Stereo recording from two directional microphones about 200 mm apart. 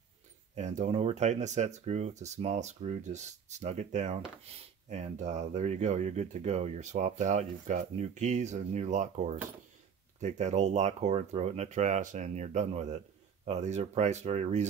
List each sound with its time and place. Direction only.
0.6 s speech: 35° right (ahead or behind)